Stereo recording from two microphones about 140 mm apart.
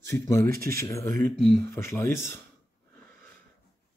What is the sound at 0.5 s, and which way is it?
Speech, 90° right.